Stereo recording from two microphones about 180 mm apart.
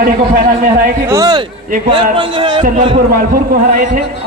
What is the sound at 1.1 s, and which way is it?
Speech, 20° right (ahead or behind).